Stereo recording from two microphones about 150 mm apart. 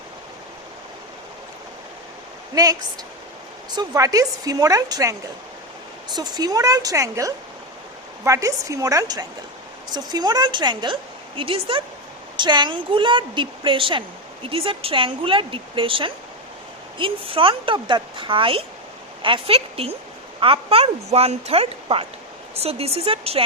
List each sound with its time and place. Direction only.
3.8 s a woman's voice: 25° right (ahead or behind); by 23.4 s 40° right (ahead or behind)